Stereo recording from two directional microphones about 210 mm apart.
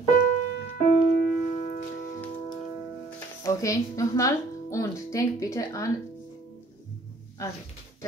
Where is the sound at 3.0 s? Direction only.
10° left (ahead or behind).